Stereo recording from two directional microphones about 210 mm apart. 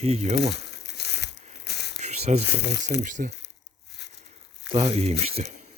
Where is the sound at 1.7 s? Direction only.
50° left (ahead or behind).